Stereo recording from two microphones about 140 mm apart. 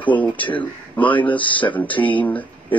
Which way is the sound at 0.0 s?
10° left (ahead or behind).